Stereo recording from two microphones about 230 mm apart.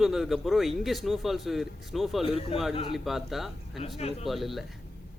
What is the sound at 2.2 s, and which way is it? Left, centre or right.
Speech, left.